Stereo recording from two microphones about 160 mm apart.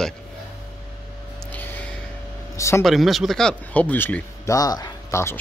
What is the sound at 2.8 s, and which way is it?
Speech, centre (ahead or behind).